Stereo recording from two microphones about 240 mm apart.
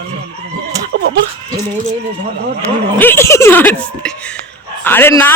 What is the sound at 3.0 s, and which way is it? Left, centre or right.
Speech, centre.